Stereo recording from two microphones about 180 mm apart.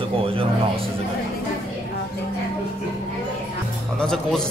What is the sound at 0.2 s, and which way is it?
Speech, 30° right (ahead or behind).